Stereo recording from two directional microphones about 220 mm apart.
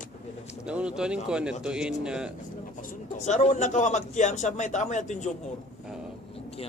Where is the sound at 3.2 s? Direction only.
35° left (ahead or behind).